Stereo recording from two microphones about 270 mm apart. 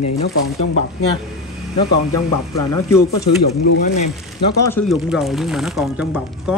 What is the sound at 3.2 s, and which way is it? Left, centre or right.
Speech, left.